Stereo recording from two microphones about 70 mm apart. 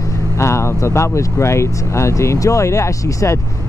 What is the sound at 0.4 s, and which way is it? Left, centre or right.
Speech, left.